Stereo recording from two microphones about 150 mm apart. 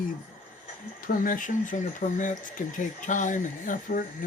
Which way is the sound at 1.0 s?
65° left (ahead or behind).